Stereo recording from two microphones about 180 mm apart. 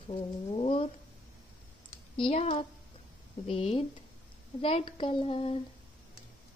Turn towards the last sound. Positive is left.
turn(degrees=30)  # may be behind; listen again after turning